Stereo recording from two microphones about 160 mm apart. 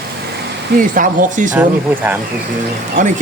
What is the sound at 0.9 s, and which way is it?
Speech, 50° right (ahead or behind).